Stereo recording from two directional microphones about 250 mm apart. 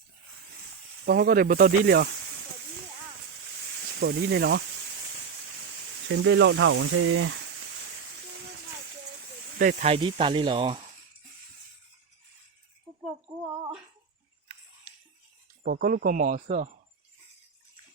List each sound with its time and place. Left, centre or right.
1.0 s speech: right
4.0 s speech: right
6.1 s speech: right
9.6 s speech: right
13.4 s speech: centre
15.6 s speech: right